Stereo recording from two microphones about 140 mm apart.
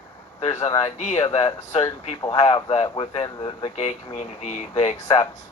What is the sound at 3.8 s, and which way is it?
Speech, 55° left (ahead or behind).